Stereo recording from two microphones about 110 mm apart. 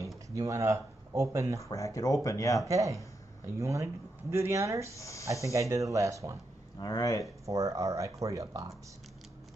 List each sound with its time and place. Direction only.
0.3 s speech: 30° right (ahead or behind)
1.6 s speech: 30° left (ahead or behind)
2.6 s speech: 30° right (ahead or behind)
4.9 s speech: 30° left (ahead or behind)
5.5 s speech: 30° right (ahead or behind)
6.8 s speech: 35° left (ahead or behind)
7.4 s speech: 30° right (ahead or behind)